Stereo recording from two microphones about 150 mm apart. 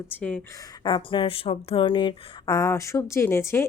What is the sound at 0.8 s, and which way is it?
Speech, 35° left (ahead or behind).